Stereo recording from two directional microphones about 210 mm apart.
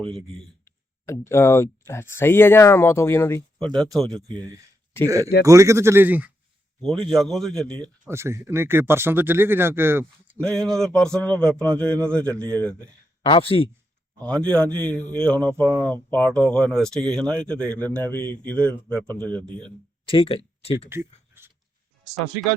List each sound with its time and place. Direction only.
0.6 s speech: 15° left (ahead or behind)
4.3 s speech: 20° right (ahead or behind); by 7.8 s 5° left (ahead or behind)
8.1 s speech: 10° right (ahead or behind)
10.4 s speech: centre (ahead or behind)
13.2 s speech: 25° left (ahead or behind)
14.3 s a man's voice: 5° left (ahead or behind)
20.1 s speech: 25° left (ahead or behind)
20.9 s a sound: 10° right (ahead or behind)